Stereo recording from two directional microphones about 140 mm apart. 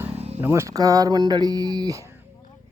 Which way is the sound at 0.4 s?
20° right (ahead or behind).